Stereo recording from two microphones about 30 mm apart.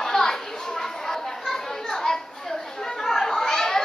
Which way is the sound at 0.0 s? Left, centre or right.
Centre.